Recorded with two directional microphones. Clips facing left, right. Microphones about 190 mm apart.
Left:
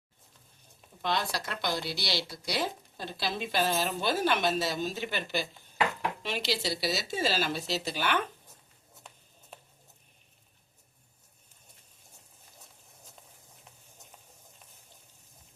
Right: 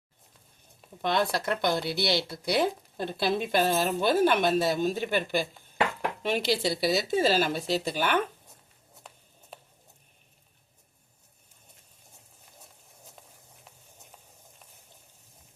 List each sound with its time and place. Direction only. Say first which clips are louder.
1.0 s speech: right 5 dB; 55° right (ahead or behind)